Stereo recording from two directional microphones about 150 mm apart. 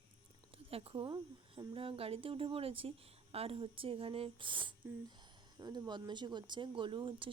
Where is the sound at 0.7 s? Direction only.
40° right (ahead or behind).